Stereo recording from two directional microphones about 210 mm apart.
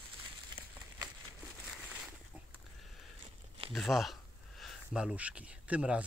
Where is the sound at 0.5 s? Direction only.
20° right (ahead or behind).